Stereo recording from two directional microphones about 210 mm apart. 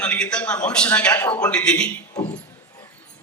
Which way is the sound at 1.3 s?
15° left (ahead or behind).